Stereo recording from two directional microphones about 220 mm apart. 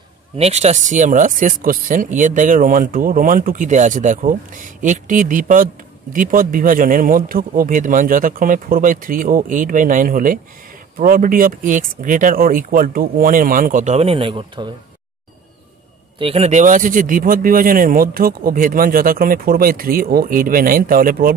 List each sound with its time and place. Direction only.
0.4 s speech: 30° right (ahead or behind)
16.2 s speech: 25° right (ahead or behind)